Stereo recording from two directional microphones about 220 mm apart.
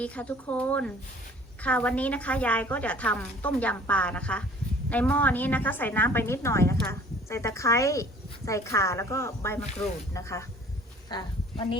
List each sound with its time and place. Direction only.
0.0 s a woman's voice: 5° left (ahead or behind); by 11.8 s 20° left (ahead or behind)